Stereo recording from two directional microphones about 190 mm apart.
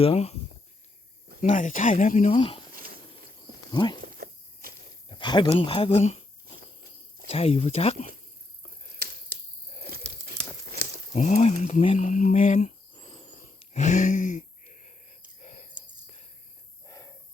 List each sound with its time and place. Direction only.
0.0 s speech: 30° left (ahead or behind)
1.4 s speech: 40° left (ahead or behind)
2.3 s speech: 25° left (ahead or behind)
3.7 s speech: 25° left (ahead or behind)
4.0 s a sound: 50° right (ahead or behind)
5.0 s speech: 25° left (ahead or behind)
7.3 s speech: 30° left (ahead or behind)
9.6 s a sound: 35° left (ahead or behind)
10.2 s crumpling: 55° right (ahead or behind)
11.1 s speech: 35° left (ahead or behind)
12.9 s wheeze: 30° left (ahead or behind)
13.8 s a sound: 40° left (ahead or behind)
15.4 s whispering: 40° left (ahead or behind)
16.8 s a sound: 20° left (ahead or behind)